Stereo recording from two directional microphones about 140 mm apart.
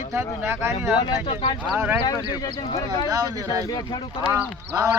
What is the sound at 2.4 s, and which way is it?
Speech, 25° left (ahead or behind).